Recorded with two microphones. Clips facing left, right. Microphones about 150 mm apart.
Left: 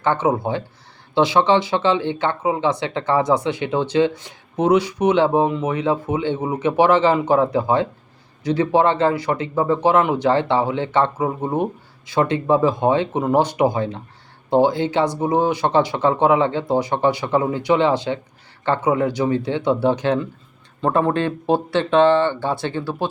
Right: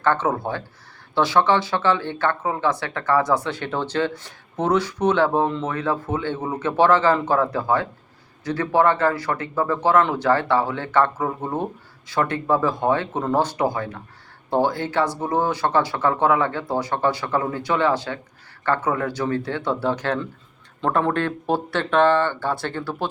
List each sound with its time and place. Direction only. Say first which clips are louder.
0.0 s speech: left 2 dB; 15° left (ahead or behind)